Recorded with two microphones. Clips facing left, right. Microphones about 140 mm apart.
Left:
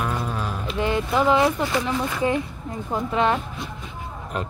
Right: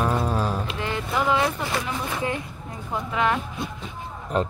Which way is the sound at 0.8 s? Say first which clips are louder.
Left 6 dB; 20° left (ahead or behind).